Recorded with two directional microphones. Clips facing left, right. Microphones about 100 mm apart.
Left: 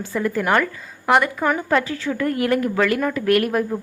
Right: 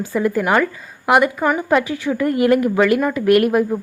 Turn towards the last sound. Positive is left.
turn(degrees=-10)  # may be behind; listen again after turning